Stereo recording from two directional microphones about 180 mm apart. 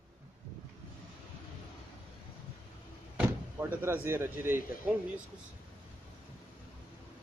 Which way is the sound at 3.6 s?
10° right (ahead or behind).